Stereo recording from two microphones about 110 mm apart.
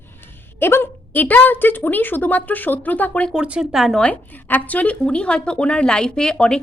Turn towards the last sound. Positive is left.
turn(degrees=5)  # may be behind; listen again after turning